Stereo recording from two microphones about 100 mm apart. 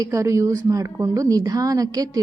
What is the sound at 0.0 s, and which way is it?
A woman's voice, 30° right (ahead or behind).